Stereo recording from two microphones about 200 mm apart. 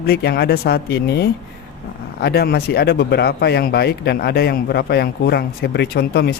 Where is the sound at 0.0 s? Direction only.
50° left (ahead or behind).